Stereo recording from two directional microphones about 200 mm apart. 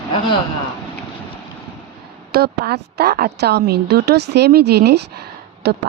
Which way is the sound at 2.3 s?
50° right (ahead or behind).